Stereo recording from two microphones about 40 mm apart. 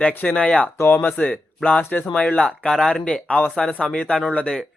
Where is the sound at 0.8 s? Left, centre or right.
Left.